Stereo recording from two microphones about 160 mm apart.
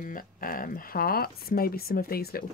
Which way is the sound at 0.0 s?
60° left (ahead or behind).